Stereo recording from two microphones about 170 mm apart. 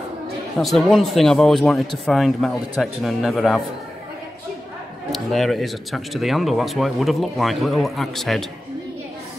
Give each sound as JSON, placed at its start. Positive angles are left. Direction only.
{"t": 0.6, "sound": "speech", "side_deg": 0}
{"t": 5.1, "sound": "speech", "side_deg": 0}